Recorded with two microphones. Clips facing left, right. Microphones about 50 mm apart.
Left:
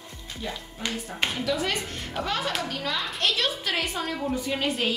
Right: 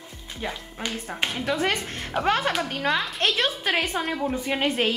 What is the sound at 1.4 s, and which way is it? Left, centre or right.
A woman's voice, right.